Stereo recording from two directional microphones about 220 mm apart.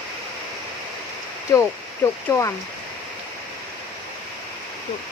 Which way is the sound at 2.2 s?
10° left (ahead or behind).